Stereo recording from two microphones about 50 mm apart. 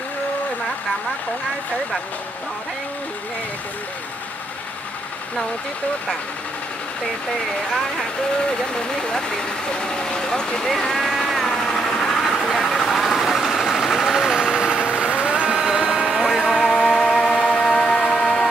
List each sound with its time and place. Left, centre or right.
8.7 s speech: centre
10.7 s vehicle: centre
15.6 s a sound: centre
16.0 s music: centre
17.1 s a sound: centre
18.1 s music: centre